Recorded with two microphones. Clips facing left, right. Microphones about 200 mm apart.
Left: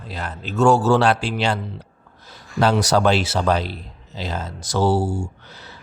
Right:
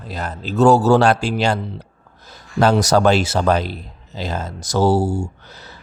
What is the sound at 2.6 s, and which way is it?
A man's voice, 45° right (ahead or behind).